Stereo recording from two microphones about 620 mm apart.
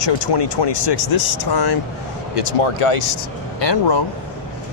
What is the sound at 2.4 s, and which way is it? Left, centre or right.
Speech, left.